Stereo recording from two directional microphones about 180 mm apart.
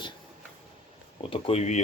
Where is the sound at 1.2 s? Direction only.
30° left (ahead or behind).